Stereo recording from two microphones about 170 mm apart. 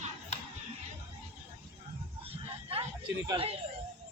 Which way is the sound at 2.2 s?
35° right (ahead or behind).